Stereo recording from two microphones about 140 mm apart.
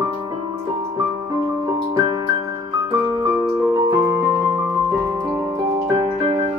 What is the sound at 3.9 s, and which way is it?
Music, 20° right (ahead or behind).